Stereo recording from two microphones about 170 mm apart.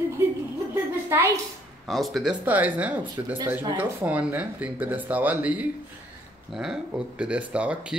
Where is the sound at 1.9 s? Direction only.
Centre (ahead or behind).